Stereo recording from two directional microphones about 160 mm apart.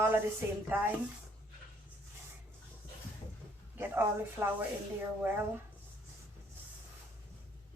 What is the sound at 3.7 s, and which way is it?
Speech, 15° right (ahead or behind).